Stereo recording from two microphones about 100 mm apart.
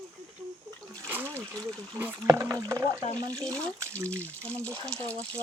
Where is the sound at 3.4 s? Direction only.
10° left (ahead or behind).